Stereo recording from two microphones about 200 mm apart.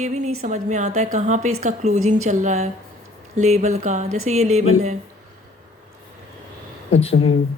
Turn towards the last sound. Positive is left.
turn(degrees=30)  # may be behind; listen again after turning